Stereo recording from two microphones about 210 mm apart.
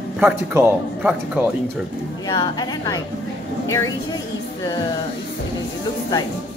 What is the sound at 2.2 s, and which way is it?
Speech, 20° left (ahead or behind).